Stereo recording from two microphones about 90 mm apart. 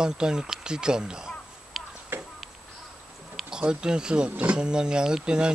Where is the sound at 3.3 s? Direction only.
10° right (ahead or behind).